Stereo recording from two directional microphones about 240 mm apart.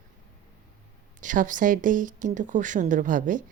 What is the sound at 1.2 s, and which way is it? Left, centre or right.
A woman's voice, right.